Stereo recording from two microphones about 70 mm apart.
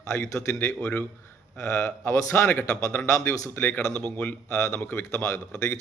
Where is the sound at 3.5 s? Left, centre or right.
Left.